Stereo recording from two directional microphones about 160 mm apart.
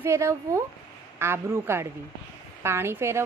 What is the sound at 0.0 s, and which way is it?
Speech, 15° right (ahead or behind).